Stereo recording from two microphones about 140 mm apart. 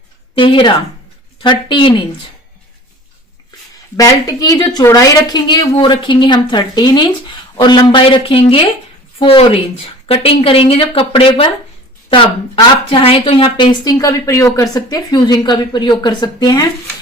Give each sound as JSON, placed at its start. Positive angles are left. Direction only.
{"t": 0.3, "sound": "speech", "side_deg": 35}
{"t": 3.9, "sound": "speech", "side_deg": 25}
{"t": 12.9, "sound": "speech", "side_deg": 40}